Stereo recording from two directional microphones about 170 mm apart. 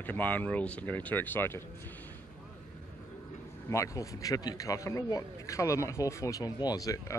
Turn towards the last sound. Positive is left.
turn(degrees=20)  # may be behind; listen again after turning